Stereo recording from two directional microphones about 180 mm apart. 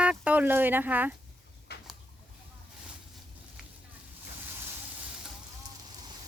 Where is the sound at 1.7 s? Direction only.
65° left (ahead or behind).